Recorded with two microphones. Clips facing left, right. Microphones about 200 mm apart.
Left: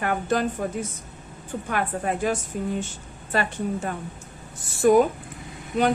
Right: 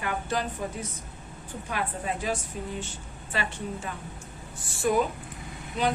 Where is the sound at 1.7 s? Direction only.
55° left (ahead or behind).